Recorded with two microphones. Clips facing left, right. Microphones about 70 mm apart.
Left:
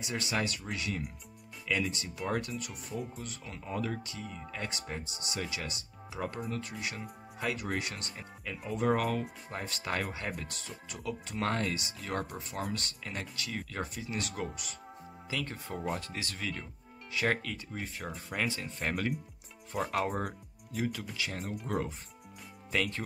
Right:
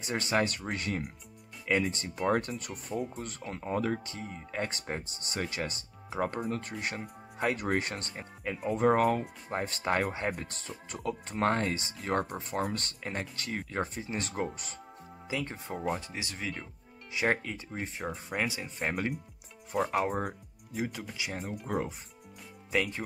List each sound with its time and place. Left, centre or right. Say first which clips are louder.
0.0 s speech: right 4 dB; right
15.2 s speech: right 2 dB; right; by 19.9 s centre
20.7 s speech: even; centre
21.4 s speech: right 2 dB; centre